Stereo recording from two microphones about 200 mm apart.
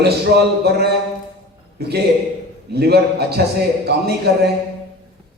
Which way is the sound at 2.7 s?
55° right (ahead or behind).